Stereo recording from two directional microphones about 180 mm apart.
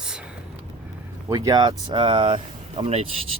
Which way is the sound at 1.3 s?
20° right (ahead or behind).